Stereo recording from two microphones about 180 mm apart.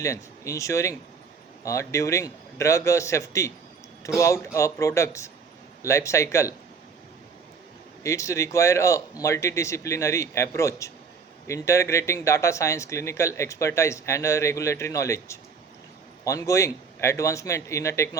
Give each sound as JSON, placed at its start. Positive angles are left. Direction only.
{"t": 0.0, "sound": "speech", "side_deg": 15}
{"t": 8.0, "sound": "speech", "side_deg": 15}